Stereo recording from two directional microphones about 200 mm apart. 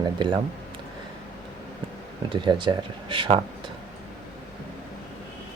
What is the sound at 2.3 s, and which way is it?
Speech, 25° right (ahead or behind).